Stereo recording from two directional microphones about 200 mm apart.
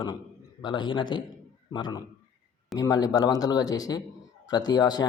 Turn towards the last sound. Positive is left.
turn(degrees=20)  # may be behind; listen again after turning